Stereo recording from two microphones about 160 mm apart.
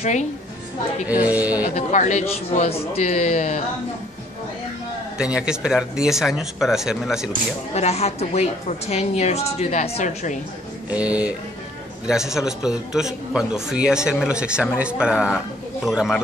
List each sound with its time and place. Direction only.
0.0 s speech: 45° left (ahead or behind)
1.0 s speech: 10° right (ahead or behind)
1.8 s speech: 50° left (ahead or behind)
5.1 s a man's voice: 5° right (ahead or behind)
7.7 s a woman's voice: 40° left (ahead or behind)
10.9 s a man's voice: 10° right (ahead or behind)